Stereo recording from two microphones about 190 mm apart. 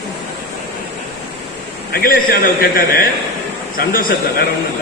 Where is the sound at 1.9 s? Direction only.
50° left (ahead or behind).